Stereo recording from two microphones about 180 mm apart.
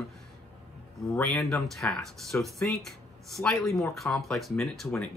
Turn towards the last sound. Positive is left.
turn(degrees=0)  # may be behind; listen again after turning